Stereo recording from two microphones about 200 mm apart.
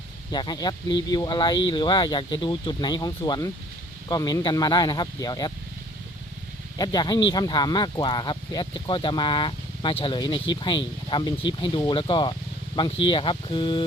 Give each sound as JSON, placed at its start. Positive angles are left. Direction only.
{"t": 0.3, "sound": "speech", "side_deg": 20}
{"t": 6.7, "sound": "speech", "side_deg": 20}